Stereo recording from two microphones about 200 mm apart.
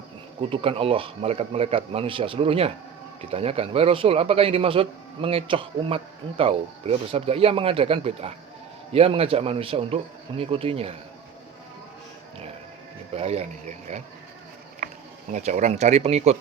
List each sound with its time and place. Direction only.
0.5 s a man's voice: 30° right (ahead or behind)
13.1 s speech: 30° right (ahead or behind)
15.3 s speech: 35° right (ahead or behind)